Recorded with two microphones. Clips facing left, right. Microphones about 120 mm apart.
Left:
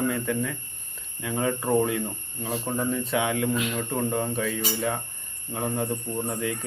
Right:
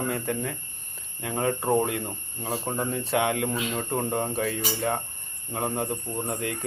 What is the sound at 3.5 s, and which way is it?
Speech, 30° right (ahead or behind).